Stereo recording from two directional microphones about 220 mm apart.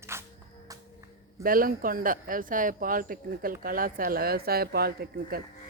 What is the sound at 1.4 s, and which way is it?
Speech, 40° right (ahead or behind).